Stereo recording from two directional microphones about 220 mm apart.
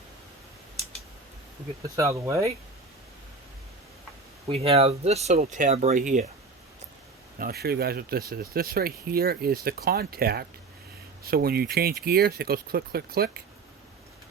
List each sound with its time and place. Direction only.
2.0 s speech: 15° right (ahead or behind)
4.4 s speech: 25° right (ahead or behind)
7.3 s speech: 45° right (ahead or behind)